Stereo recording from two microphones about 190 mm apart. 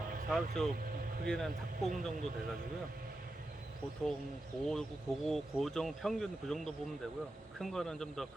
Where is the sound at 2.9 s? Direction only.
50° right (ahead or behind).